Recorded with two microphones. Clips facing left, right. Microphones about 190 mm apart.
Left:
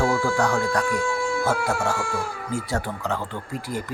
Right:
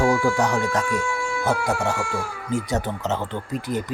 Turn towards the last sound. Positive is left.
turn(degrees=-20)  # may be behind; listen again after turning